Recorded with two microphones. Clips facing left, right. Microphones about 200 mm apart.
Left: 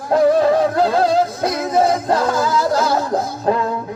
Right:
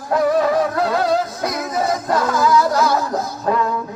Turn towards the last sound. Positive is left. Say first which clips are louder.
# left 2 dB
turn(degrees=30)  # may be behind; listen again after turning